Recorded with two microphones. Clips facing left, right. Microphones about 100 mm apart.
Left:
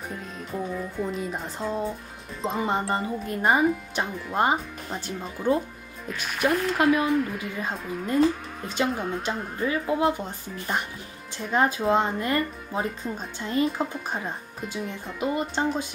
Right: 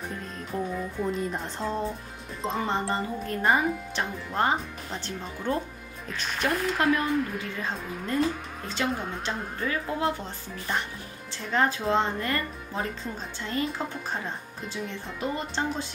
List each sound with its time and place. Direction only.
0.1 s speech: centre (ahead or behind)
9.7 s speech: 20° left (ahead or behind)